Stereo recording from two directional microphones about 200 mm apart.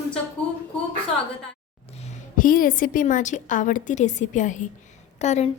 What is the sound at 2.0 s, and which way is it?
A woman's voice, 40° left (ahead or behind).